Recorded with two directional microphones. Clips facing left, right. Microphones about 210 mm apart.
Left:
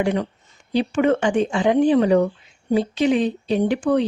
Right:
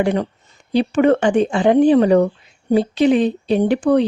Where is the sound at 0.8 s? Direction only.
40° right (ahead or behind).